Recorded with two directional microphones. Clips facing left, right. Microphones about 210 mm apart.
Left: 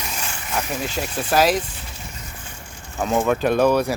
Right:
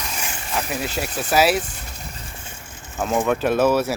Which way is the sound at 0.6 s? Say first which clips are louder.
Even; 5° right (ahead or behind).